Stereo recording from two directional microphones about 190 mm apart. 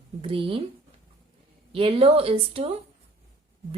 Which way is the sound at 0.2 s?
30° right (ahead or behind).